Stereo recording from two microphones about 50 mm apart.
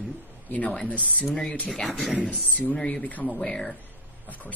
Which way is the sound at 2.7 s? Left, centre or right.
Left.